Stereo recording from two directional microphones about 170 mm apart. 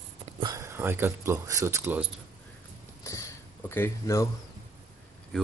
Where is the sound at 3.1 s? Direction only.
15° left (ahead or behind).